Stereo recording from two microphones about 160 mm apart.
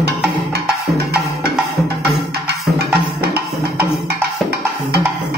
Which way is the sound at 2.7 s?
90° right.